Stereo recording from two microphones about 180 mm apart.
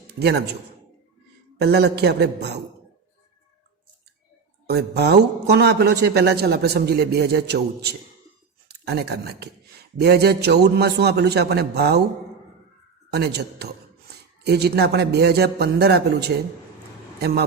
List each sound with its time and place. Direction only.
0.1 s a man's voice: 65° right (ahead or behind)
1.5 s a man's voice: 65° right (ahead or behind)
4.6 s speech: 65° right (ahead or behind)
13.1 s a man's voice: 65° right (ahead or behind)